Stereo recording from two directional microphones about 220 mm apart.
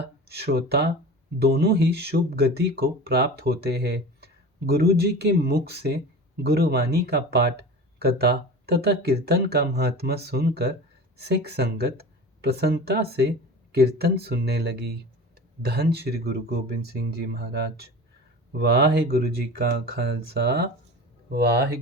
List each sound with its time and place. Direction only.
0.3 s speech: 45° right (ahead or behind)